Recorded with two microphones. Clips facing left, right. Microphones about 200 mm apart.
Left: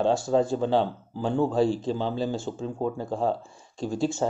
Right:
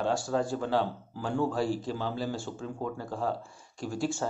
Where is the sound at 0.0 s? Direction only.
25° left (ahead or behind).